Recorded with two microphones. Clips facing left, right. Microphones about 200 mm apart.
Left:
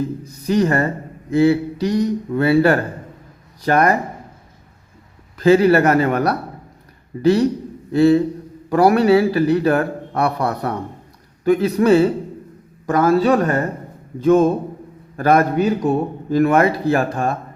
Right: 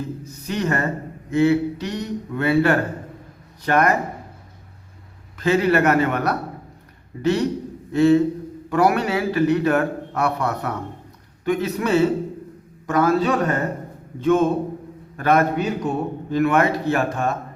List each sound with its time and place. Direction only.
0.4 s a man's voice: 35° left (ahead or behind)
5.4 s a man's voice: 35° left (ahead or behind)